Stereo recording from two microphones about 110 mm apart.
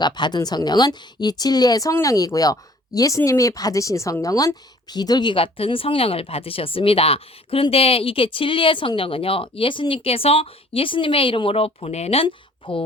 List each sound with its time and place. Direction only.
0.0 s a woman's voice: 40° left (ahead or behind)